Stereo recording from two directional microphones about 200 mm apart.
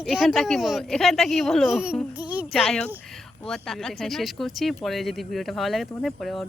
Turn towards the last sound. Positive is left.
turn(degrees=0)  # may be behind; listen again after turning